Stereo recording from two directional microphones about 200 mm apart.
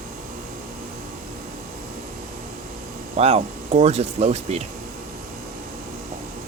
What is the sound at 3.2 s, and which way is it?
Speech, 30° right (ahead or behind).